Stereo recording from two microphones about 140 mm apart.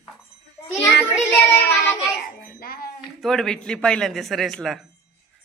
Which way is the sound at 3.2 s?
Centre (ahead or behind).